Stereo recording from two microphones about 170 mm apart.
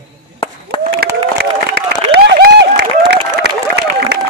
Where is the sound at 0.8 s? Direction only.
70° right (ahead or behind).